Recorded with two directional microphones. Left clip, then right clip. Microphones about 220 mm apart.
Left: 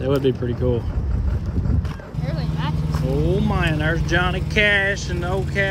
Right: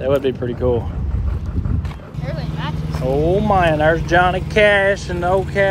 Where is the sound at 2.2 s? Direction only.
40° left (ahead or behind).